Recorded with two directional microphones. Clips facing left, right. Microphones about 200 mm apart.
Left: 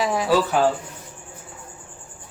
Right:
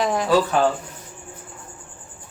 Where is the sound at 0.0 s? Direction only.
5° left (ahead or behind).